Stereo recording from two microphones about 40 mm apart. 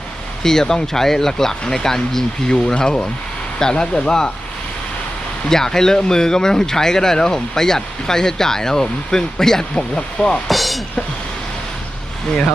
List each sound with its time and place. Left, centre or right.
0.4 s speech: centre
5.5 s speech: centre
10.5 s music: centre